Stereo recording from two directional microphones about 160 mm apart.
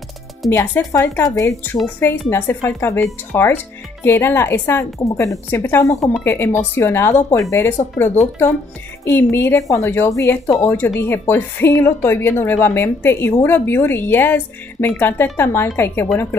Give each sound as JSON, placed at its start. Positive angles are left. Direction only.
{"t": 0.5, "sound": "a woman's voice", "side_deg": 15}